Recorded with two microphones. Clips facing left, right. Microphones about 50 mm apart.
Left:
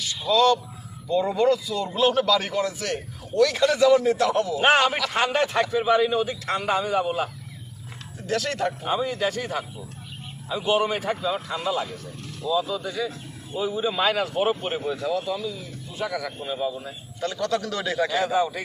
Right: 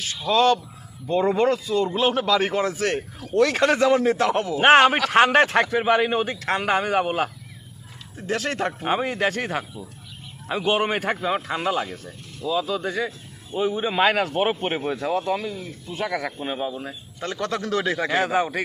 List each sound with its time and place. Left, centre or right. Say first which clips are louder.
0.3 s a man's voice: right 1 dB; right
1.9 s a man's voice: left 4 dB; right
4.7 s speech: right 8 dB; right
5.6 s speech: right 1 dB; right
8.3 s a man's voice: even; right
8.9 s speech: right 4 dB; right
10.7 s a man's voice: even; right
18.1 s speech: right 1 dB; right